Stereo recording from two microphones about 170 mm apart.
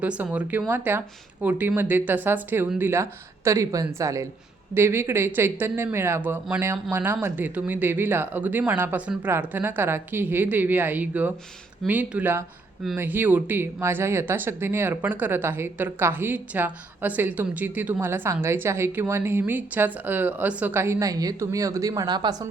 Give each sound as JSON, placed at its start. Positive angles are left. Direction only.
{"t": 0.0, "sound": "speech", "side_deg": -5}